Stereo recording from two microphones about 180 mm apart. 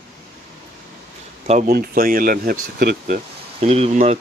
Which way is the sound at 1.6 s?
55° right (ahead or behind).